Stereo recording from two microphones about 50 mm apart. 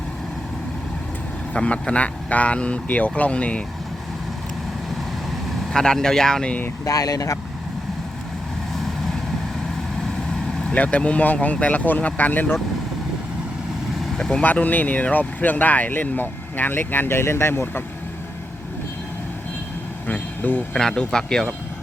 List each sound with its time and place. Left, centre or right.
1.5 s speech: left
5.7 s speech: centre
10.8 s speech: left
14.0 s vehicle: centre
14.4 s speech: left
20.1 s vehicle: left
20.7 s speech: centre